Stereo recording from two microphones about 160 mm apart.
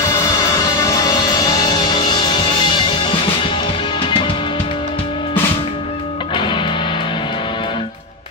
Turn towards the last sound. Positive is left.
turn(degrees=30)  # may be behind; listen again after turning